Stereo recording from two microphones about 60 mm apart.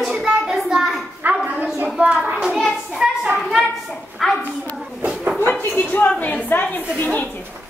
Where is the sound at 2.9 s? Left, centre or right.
Centre.